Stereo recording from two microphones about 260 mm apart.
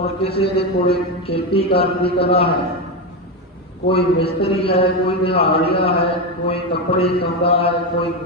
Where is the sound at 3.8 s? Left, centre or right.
Left.